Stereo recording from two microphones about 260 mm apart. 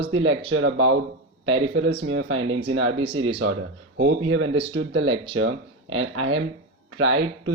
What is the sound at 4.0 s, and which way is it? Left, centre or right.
Speech, right.